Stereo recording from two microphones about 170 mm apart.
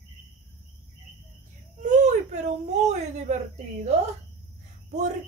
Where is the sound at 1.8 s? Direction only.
45° right (ahead or behind).